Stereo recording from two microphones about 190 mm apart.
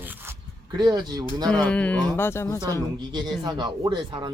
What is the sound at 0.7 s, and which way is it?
Speech, 20° right (ahead or behind).